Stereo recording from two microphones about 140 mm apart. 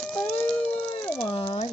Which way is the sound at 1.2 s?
35° left (ahead or behind).